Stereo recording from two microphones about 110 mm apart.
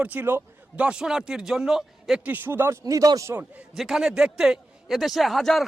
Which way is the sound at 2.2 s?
15° right (ahead or behind).